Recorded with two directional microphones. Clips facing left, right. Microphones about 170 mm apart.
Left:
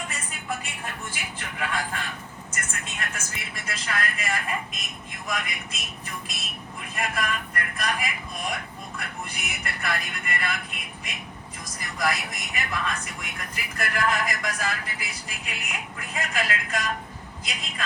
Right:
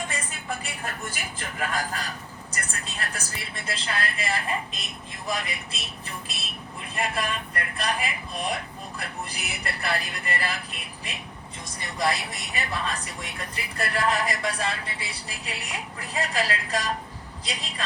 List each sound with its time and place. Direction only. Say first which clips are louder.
0.6 s a man's voice: right 2 dB; 40° right (ahead or behind)